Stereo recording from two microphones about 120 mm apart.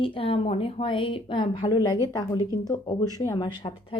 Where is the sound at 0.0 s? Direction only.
50° left (ahead or behind).